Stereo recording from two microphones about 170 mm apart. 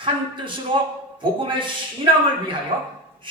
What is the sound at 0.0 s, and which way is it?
A man's voice, 30° right (ahead or behind).